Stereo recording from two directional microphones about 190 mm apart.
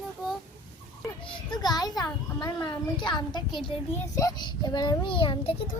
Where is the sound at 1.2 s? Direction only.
25° left (ahead or behind).